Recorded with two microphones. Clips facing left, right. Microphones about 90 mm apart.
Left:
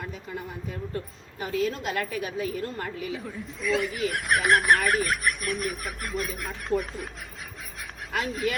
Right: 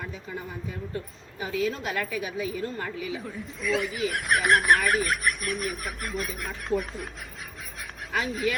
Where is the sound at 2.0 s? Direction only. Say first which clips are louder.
Left 1 dB; 50° left (ahead or behind).